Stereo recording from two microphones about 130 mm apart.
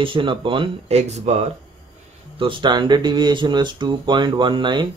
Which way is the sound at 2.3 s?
40° right (ahead or behind).